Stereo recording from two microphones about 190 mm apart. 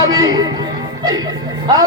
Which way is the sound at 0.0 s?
20° right (ahead or behind).